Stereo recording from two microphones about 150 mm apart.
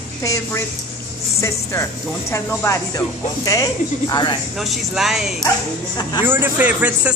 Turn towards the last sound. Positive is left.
turn(degrees=-10)  # may be behind; listen again after turning